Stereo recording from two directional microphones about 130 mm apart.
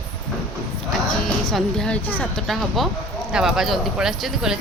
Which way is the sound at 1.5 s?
5° left (ahead or behind).